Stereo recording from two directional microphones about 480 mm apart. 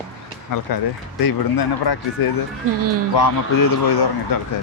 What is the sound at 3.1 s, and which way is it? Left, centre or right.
A man's voice, left.